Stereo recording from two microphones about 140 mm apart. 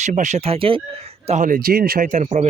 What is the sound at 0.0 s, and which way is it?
Speech, 60° right (ahead or behind).